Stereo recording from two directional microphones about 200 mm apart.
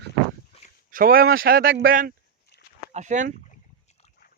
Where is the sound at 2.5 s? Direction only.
55° left (ahead or behind).